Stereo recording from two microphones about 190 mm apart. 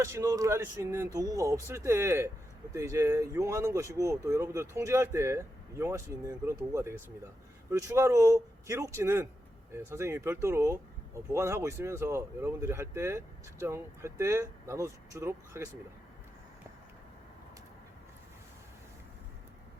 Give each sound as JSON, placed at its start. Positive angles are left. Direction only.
{"t": 0.0, "sound": "speech", "side_deg": -15}